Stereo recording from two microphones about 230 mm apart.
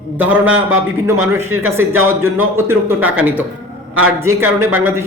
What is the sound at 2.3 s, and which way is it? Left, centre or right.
Speech, centre.